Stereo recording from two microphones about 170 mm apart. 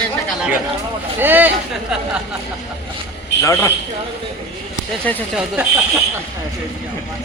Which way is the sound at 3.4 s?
20° left (ahead or behind).